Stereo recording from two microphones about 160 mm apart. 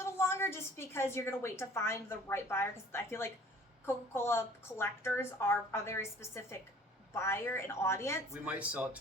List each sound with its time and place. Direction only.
0.0 s a woman's voice: 15° left (ahead or behind)
8.3 s speech: 5° right (ahead or behind)